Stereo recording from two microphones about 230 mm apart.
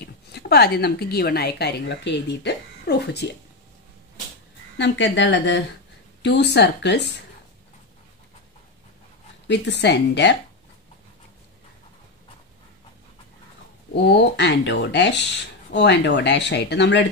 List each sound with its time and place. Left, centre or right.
0.0 s a woman's voice: left
4.7 s speech: left
9.5 s speech: left
13.9 s speech: left